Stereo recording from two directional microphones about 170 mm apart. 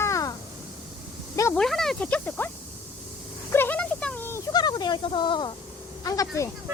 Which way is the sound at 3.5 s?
10° left (ahead or behind).